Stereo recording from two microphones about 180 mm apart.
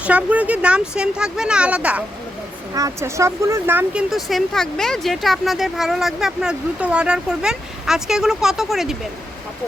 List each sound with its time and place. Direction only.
0.0 s speech: 5° right (ahead or behind)
2.7 s speech: 15° right (ahead or behind)
4.1 s speech: centre (ahead or behind)